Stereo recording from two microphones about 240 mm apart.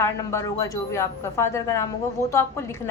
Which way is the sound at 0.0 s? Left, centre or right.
Centre.